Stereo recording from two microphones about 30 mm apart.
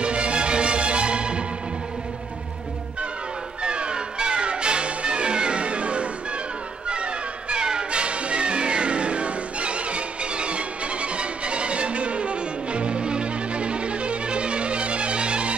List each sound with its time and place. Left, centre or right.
0.0 s music: right
3.6 s music: right